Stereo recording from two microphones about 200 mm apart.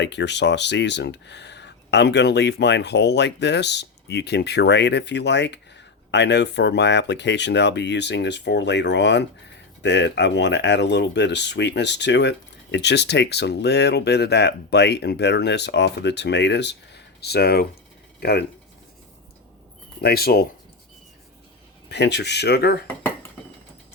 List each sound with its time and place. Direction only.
0.0 s speech: 60° left (ahead or behind)
20.0 s speech: 50° left (ahead or behind)
21.8 s speech: 55° left (ahead or behind)